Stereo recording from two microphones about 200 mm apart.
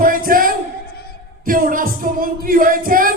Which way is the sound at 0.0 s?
45° right (ahead or behind).